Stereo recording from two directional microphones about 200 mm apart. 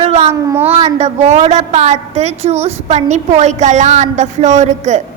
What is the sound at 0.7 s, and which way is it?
A woman's voice, 30° right (ahead or behind).